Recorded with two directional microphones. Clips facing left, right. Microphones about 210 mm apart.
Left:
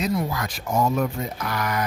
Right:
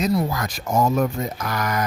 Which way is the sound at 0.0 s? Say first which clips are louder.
Right 3 dB; 40° right (ahead or behind).